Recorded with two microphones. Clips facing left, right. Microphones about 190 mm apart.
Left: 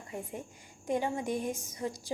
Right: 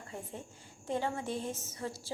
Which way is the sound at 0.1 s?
15° left (ahead or behind).